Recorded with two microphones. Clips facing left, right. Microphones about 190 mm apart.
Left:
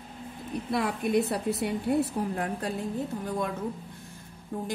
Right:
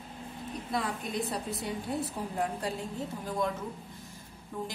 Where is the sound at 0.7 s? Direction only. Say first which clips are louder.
Left 7 dB; 60° left (ahead or behind).